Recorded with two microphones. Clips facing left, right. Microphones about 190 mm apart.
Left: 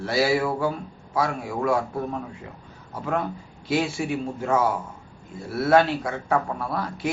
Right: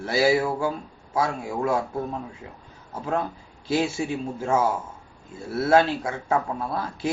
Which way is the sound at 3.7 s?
25° right (ahead or behind).